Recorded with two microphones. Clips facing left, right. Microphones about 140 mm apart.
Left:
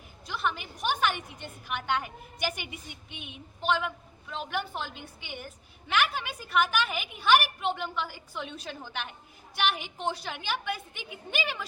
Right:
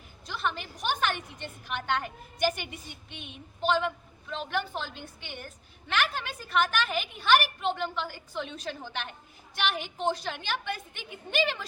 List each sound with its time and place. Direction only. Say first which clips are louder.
0.3 s a woman's voice: left 1 dB; 10° left (ahead or behind)